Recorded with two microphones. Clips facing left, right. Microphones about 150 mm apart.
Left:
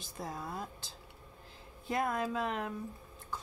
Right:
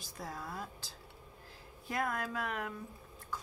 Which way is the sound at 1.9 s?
25° left (ahead or behind).